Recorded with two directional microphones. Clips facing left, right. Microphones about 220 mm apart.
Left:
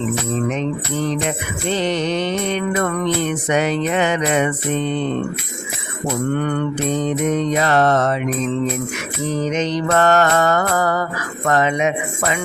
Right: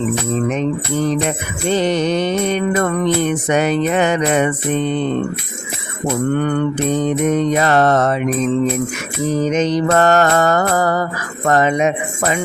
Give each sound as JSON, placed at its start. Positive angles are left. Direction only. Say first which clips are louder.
{"t": 1.6, "sound": "music", "louder": "right 4 dB", "side_deg": -45}
{"t": 3.2, "sound": "music", "louder": "right 3 dB", "side_deg": -45}
{"t": 7.3, "sound": "music", "louder": "right 2 dB", "side_deg": -45}
{"t": 9.5, "sound": "mantra", "louder": "right 3 dB", "side_deg": -40}